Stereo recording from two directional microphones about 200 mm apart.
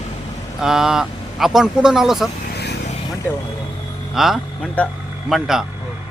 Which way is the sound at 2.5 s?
55° left (ahead or behind).